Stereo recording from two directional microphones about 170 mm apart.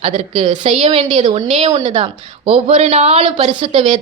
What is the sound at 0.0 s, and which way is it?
A woman's voice, 40° right (ahead or behind).